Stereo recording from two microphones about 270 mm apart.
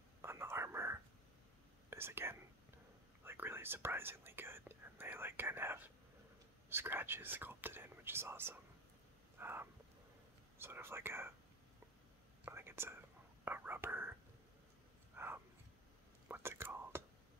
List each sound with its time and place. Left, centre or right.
0.2 s whispering: centre
1.9 s speech: centre
9.4 s a sound: centre
10.6 s speech: centre
12.4 s whispering: centre
13.5 s speech: centre
15.1 s a sound: centre
16.3 s whispering: centre